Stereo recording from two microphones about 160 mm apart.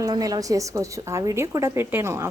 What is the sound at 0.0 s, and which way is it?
A woman's voice, 20° right (ahead or behind).